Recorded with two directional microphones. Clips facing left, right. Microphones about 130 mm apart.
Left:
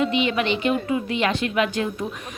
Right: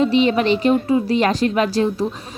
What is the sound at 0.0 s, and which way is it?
A woman's voice, 35° right (ahead or behind).